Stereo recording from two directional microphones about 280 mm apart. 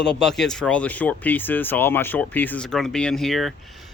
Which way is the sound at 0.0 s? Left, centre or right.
Centre.